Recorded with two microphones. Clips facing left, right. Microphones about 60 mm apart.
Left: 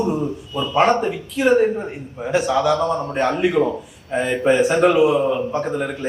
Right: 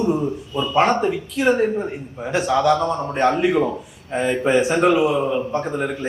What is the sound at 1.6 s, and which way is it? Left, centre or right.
Speech, centre.